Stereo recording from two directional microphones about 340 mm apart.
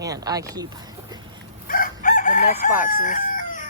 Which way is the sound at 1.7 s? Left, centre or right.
Left.